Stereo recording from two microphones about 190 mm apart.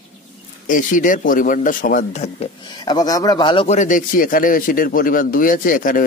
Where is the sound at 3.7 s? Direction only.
45° left (ahead or behind).